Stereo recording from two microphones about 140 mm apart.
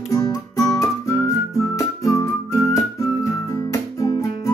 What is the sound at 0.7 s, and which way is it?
Music, 20° left (ahead or behind).